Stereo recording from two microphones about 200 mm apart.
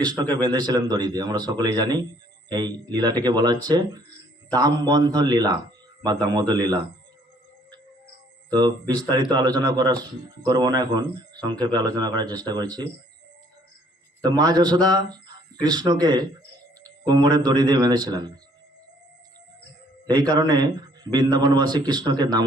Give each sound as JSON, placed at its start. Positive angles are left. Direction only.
{"t": 0.0, "sound": "a man's voice", "side_deg": 5}
{"t": 0.4, "sound": "speech", "side_deg": -20}
{"t": 8.4, "sound": "speech", "side_deg": -20}
{"t": 14.2, "sound": "speech", "side_deg": -20}
{"t": 20.1, "sound": "speech", "side_deg": -20}